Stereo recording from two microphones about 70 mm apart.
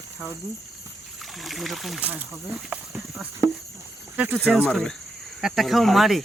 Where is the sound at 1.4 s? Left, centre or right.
Centre.